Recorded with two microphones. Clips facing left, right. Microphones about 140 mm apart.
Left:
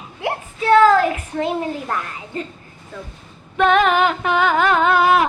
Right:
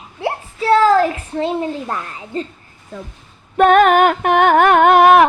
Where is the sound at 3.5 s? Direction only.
45° right (ahead or behind); by 5.2 s 60° right (ahead or behind).